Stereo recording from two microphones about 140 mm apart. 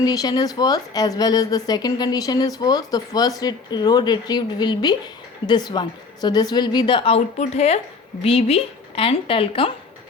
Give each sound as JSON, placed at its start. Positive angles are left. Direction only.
{"t": 0.0, "sound": "a woman's voice", "side_deg": 25}